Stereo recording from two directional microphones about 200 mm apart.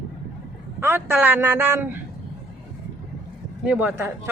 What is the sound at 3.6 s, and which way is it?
Speech, 5° right (ahead or behind).